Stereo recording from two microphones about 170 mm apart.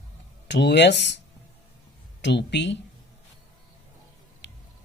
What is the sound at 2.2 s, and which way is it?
Speech, 90° left.